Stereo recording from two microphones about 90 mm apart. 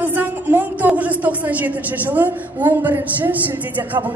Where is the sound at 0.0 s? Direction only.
20° right (ahead or behind).